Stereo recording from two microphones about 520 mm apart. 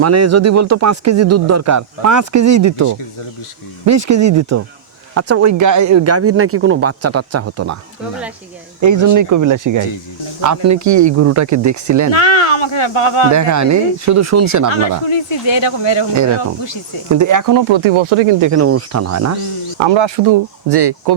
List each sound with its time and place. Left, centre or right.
0.0 s speech: right
8.8 s speech: right
12.2 s speech: left
13.3 s speech: right
15.0 s speech: left
17.1 s speech: right
17.7 s speech: right
18.3 s speech: right
19.8 s speech: right